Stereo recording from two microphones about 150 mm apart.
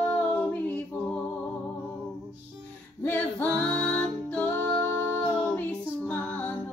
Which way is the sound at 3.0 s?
10° left (ahead or behind).